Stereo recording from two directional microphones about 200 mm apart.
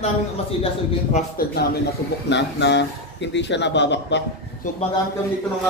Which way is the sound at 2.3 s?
60° left (ahead or behind).